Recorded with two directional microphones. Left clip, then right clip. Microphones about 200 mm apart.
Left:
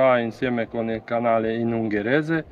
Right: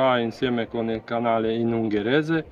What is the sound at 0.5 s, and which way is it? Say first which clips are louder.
Speech: left 1 dB; 35° left (ahead or behind).